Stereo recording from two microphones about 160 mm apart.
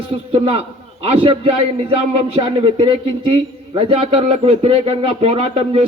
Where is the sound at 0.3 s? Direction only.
40° right (ahead or behind).